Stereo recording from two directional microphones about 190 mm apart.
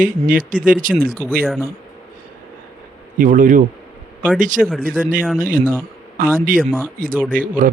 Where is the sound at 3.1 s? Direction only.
45° right (ahead or behind).